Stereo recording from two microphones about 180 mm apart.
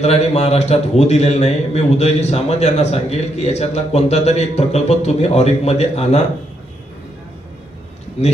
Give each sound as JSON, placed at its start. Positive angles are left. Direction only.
{"t": 0.0, "sound": "a man's voice", "side_deg": 35}